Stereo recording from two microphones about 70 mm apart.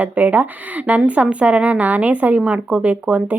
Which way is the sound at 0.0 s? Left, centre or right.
Right.